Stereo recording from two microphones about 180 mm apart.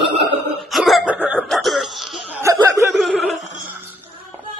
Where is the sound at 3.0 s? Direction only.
Centre (ahead or behind).